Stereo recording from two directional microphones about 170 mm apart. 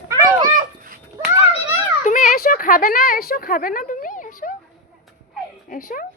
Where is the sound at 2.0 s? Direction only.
50° left (ahead or behind).